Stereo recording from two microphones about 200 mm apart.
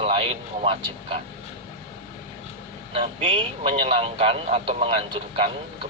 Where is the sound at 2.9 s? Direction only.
30° right (ahead or behind).